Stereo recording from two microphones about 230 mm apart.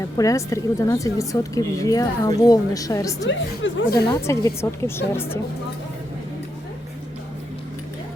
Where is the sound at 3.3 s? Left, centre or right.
Left.